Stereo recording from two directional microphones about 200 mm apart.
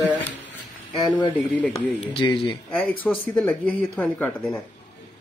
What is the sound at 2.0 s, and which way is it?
Speech, 25° left (ahead or behind).